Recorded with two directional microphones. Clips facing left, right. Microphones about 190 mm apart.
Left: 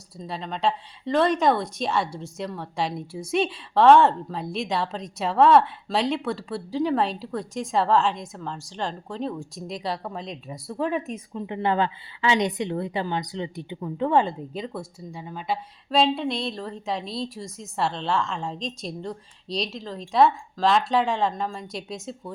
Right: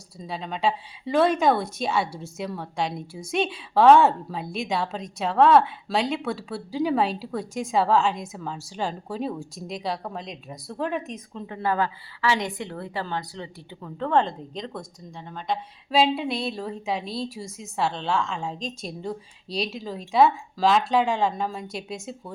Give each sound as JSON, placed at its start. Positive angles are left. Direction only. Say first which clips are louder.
{"t": 0.2, "sound": "a woman's voice", "louder": "even", "side_deg": 0}
{"t": 11.4, "sound": "a woman's voice", "louder": "left 2 dB", "side_deg": 20}
{"t": 15.9, "sound": "a woman's voice", "louder": "even", "side_deg": -5}